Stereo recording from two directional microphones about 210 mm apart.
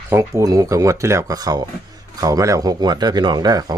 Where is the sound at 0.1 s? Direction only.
15° right (ahead or behind).